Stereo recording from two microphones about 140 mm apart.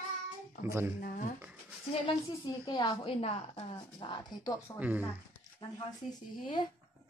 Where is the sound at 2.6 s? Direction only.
30° left (ahead or behind).